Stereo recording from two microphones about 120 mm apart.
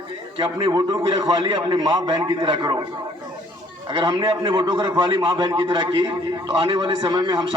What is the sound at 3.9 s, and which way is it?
A man's voice, 40° right (ahead or behind).